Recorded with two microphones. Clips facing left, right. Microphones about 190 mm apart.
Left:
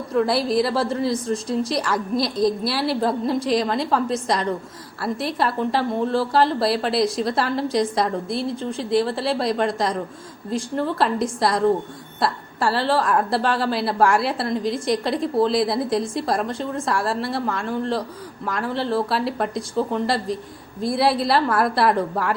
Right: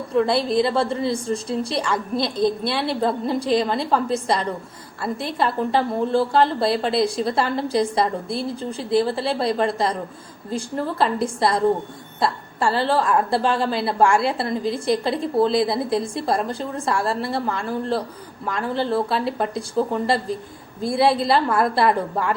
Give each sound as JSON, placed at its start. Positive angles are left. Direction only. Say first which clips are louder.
{"t": 0.1, "sound": "a woman's voice", "louder": "even", "side_deg": 0}
{"t": 1.5, "sound": "a woman's voice", "louder": "left 3 dB", "side_deg": -30}
{"t": 1.8, "sound": "a woman's voice", "louder": "left 1 dB", "side_deg": 5}